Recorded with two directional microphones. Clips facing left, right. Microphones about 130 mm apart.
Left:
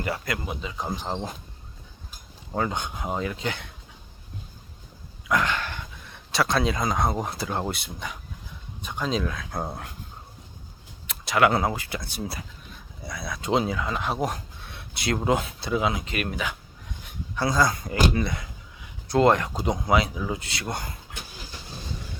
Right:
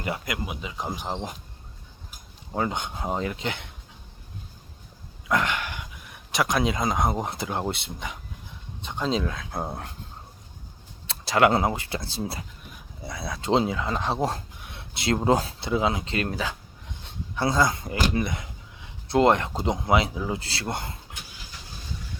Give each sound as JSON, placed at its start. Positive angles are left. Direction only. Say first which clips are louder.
{"t": 0.0, "sound": "speech", "louder": "left 1 dB", "side_deg": -20}
{"t": 2.6, "sound": "speech", "louder": "even", "side_deg": -20}
{"t": 5.3, "sound": "speech", "louder": "even", "side_deg": -20}
{"t": 11.0, "sound": "speech", "louder": "right 1 dB", "side_deg": -30}